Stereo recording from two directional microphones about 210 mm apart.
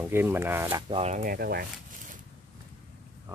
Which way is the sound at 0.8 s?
30° right (ahead or behind).